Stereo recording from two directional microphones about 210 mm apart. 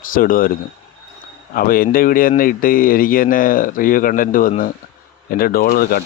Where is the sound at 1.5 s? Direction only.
45° left (ahead or behind).